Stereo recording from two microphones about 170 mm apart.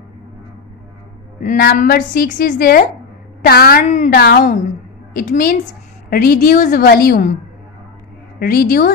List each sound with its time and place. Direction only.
1.6 s a woman's voice: 65° left (ahead or behind)
8.4 s a woman's voice: 65° left (ahead or behind)